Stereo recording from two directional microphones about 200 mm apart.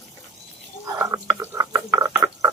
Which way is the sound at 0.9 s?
15° right (ahead or behind).